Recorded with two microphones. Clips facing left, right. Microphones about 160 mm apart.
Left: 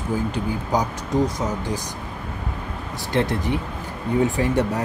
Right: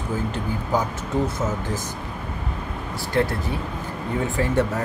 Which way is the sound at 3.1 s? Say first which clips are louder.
Even; 20° left (ahead or behind).